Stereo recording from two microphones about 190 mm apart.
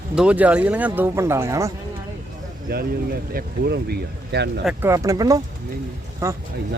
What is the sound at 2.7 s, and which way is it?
Speech, 55° right (ahead or behind).